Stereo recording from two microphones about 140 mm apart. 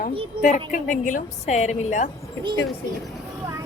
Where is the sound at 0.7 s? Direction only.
70° left (ahead or behind).